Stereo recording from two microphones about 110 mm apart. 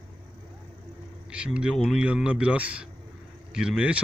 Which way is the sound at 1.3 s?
10° right (ahead or behind).